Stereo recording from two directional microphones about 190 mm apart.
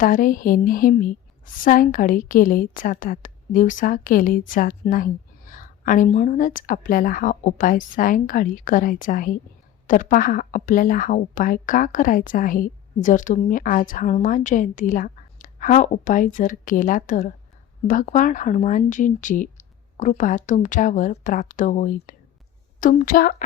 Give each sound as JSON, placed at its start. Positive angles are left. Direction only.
{"t": 0.0, "sound": "a woman's voice", "side_deg": 45}